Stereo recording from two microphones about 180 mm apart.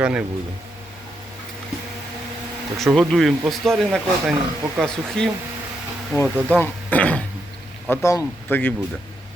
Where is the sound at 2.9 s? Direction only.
Centre (ahead or behind).